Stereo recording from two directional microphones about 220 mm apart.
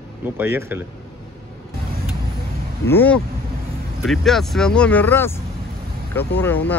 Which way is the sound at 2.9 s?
10° left (ahead or behind).